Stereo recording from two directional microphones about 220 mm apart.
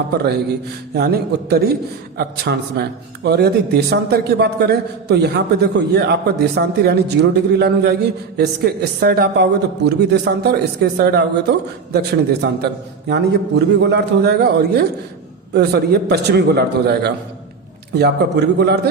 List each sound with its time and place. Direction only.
0.9 s a man's voice: 45° right (ahead or behind)